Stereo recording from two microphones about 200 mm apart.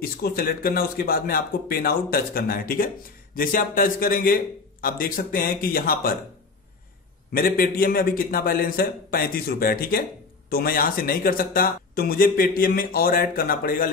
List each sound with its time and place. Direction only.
0.0 s speech: 50° left (ahead or behind)
7.3 s speech: 45° left (ahead or behind)